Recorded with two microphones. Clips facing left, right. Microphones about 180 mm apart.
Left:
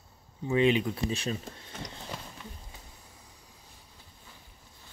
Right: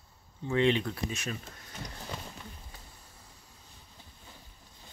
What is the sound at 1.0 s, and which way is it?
Speech, 30° left (ahead or behind).